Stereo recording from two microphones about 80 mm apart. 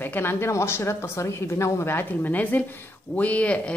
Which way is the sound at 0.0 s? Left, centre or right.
Left.